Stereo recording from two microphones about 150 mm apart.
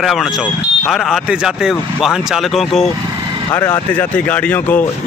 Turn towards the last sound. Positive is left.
turn(degrees=10)  # may be behind; listen again after turning